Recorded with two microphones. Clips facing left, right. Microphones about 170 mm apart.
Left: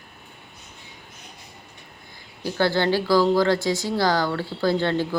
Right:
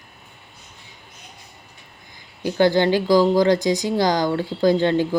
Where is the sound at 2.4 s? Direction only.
15° right (ahead or behind).